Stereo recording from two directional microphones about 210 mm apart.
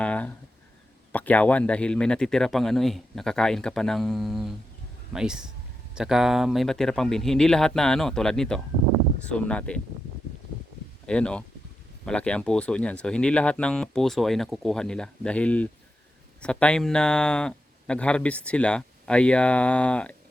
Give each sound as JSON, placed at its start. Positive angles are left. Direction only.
{"t": 0.0, "sound": "a sound", "side_deg": 5}
{"t": 1.1, "sound": "speech", "side_deg": 5}
{"t": 11.0, "sound": "speech", "side_deg": 5}